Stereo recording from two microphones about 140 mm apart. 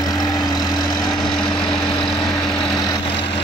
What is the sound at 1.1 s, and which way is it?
Vehicle, centre (ahead or behind).